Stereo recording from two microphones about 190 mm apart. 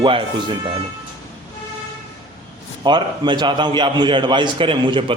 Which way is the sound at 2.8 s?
25° right (ahead or behind).